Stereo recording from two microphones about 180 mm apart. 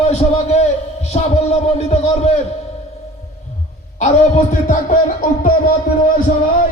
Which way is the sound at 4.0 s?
45° left (ahead or behind).